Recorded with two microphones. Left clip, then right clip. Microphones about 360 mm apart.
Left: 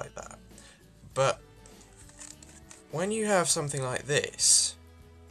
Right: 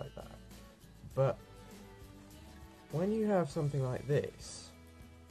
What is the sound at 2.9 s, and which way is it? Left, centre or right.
Speech, left.